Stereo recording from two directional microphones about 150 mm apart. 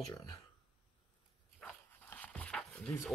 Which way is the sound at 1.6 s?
10° left (ahead or behind).